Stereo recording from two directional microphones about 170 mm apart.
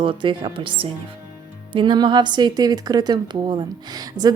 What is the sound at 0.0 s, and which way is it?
A woman's voice, 30° right (ahead or behind).